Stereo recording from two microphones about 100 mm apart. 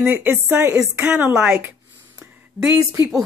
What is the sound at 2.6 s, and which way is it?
Speech, 25° right (ahead or behind).